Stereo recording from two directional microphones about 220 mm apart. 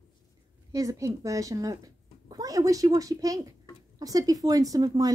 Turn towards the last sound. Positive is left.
turn(degrees=-15)  # may be behind; listen again after turning